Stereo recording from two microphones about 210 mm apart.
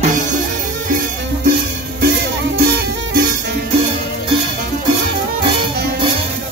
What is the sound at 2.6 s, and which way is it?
Music, 50° right (ahead or behind).